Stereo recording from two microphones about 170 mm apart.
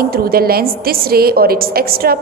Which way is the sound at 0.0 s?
60° right (ahead or behind).